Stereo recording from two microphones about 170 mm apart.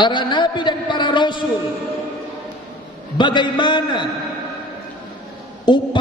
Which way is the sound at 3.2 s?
25° left (ahead or behind).